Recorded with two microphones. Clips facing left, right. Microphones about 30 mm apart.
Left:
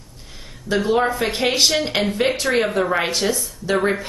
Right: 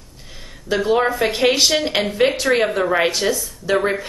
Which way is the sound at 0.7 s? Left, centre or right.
Centre.